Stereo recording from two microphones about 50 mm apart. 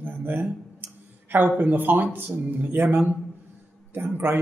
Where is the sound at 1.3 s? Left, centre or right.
Right.